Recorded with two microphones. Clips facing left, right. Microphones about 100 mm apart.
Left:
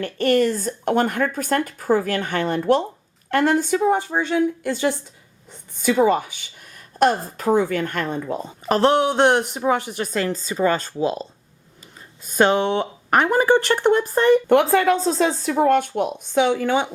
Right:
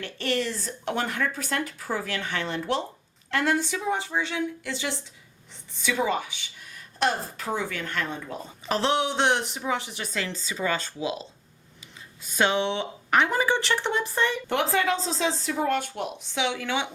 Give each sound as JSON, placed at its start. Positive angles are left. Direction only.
{"t": 0.0, "sound": "a woman's voice", "side_deg": 50}